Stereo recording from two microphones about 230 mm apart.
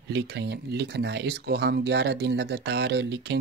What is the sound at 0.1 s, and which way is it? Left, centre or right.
Speech, right.